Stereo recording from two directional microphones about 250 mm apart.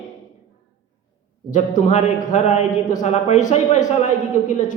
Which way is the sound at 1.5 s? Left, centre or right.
Left.